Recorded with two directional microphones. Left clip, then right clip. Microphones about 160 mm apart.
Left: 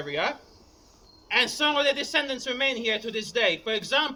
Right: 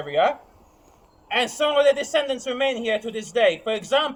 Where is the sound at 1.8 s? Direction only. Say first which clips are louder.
Right 6 dB; 15° right (ahead or behind).